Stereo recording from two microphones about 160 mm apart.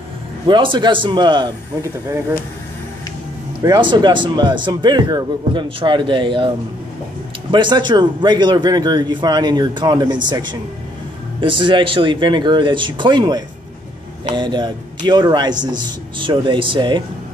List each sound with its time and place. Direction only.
0.5 s a man's voice: 30° right (ahead or behind)
3.6 s a man's voice: 25° right (ahead or behind)
7.5 s a man's voice: 30° right (ahead or behind)